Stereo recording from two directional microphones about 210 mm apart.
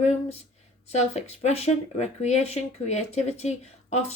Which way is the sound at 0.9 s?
30° left (ahead or behind).